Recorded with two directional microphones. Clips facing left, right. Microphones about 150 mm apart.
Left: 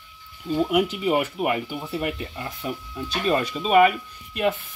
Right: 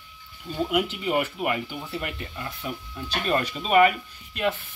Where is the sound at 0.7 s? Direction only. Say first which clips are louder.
Left 2 dB; 5° left (ahead or behind).